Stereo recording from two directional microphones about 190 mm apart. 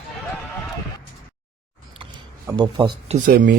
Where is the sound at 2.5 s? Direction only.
20° right (ahead or behind).